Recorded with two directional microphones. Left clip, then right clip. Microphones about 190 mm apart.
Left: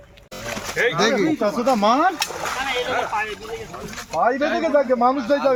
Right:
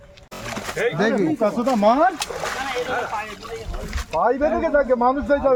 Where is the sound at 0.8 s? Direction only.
55° right (ahead or behind).